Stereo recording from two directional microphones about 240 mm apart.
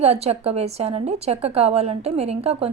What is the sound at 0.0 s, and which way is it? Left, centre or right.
A woman's voice, right.